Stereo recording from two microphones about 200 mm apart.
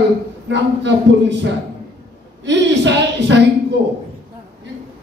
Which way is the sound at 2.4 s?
60° right (ahead or behind).